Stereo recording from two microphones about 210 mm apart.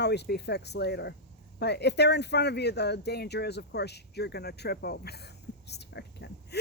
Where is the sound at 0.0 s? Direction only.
50° left (ahead or behind).